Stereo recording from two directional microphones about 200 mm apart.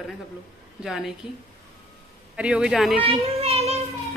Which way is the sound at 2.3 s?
5° right (ahead or behind).